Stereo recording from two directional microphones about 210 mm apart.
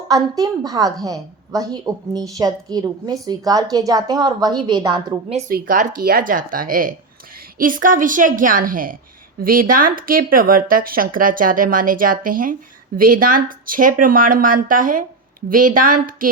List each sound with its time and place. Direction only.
0.1 s a woman's voice: 15° right (ahead or behind)
5.5 s speech: 45° right (ahead or behind)